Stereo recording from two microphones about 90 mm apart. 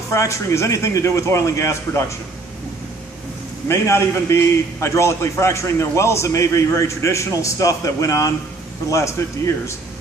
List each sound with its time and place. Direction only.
0.1 s a man's voice: 35° left (ahead or behind)
3.6 s a man's voice: 30° left (ahead or behind)